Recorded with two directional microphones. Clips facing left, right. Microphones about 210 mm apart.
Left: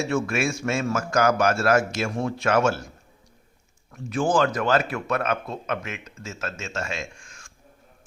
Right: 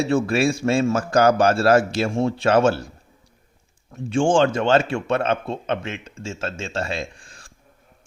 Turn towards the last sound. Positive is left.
turn(degrees=-35)  # may be behind; listen again after turning